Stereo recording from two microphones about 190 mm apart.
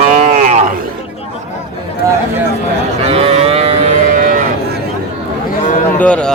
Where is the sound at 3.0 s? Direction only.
30° right (ahead or behind).